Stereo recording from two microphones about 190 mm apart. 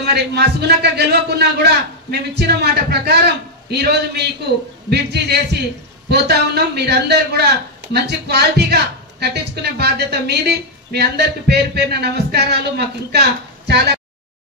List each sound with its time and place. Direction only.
0.0 s a woman's voice: 60° right (ahead or behind)